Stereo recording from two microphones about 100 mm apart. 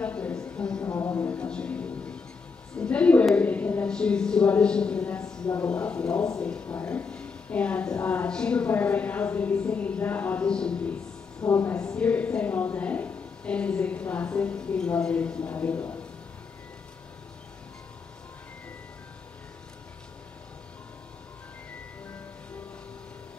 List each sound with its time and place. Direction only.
0.0 s a sound: 15° left (ahead or behind)
0.8 s music: 25° left (ahead or behind)
1.3 s music: 10° left (ahead or behind)
2.8 s a sound: 10° left (ahead or behind)
5.6 s speech: 10° left (ahead or behind)
11.4 s a woman's voice: 25° left (ahead or behind)
11.7 s a woman's voice: 10° left (ahead or behind)